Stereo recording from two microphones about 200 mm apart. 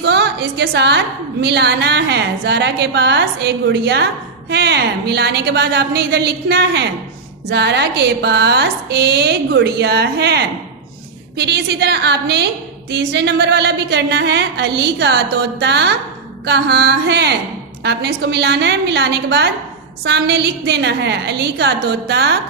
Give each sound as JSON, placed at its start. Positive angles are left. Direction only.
{"t": 0.0, "sound": "a woman's voice", "side_deg": -55}